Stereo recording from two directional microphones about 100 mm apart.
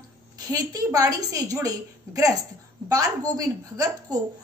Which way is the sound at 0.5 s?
35° right (ahead or behind).